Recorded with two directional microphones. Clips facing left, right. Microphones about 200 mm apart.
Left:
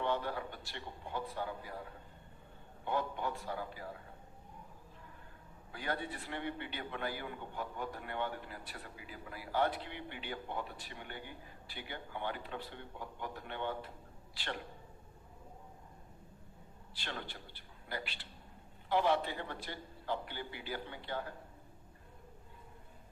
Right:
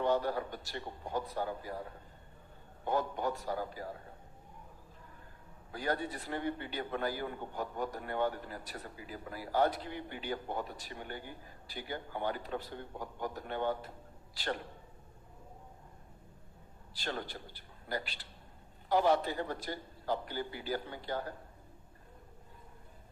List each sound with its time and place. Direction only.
0.0 s a man's voice: 40° right (ahead or behind)
2.8 s a man's voice: 40° right (ahead or behind)
5.7 s a man's voice: 40° right (ahead or behind)
16.9 s a man's voice: 40° right (ahead or behind)